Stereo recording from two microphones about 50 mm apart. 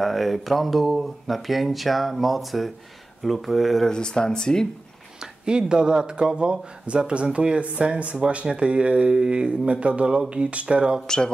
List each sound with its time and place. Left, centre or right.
0.0 s speech: centre
3.9 s speech: centre
5.2 s speech: centre
11.1 s speech: centre